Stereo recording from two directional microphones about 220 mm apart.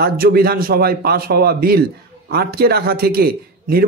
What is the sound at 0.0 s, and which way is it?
A man's voice, 45° right (ahead or behind).